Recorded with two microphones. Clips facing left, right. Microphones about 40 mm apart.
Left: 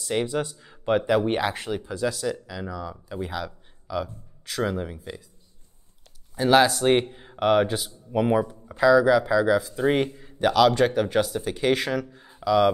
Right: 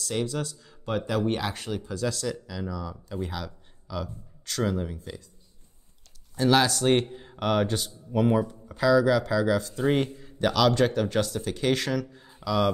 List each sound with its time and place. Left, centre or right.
0.0 s speech: left
6.3 s speech: centre